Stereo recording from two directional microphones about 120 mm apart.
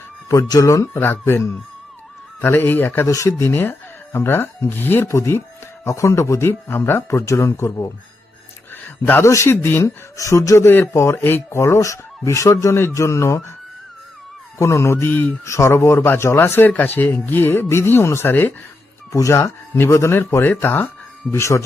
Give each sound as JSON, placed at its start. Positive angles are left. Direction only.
{"t": 0.3, "sound": "a man's voice", "side_deg": 30}
{"t": 14.6, "sound": "a man's voice", "side_deg": 25}